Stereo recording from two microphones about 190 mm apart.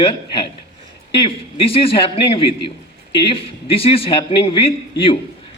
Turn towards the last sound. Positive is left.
turn(degrees=30)  # may be behind; listen again after turning